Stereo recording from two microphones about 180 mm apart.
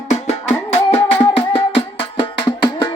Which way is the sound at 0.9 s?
30° left (ahead or behind).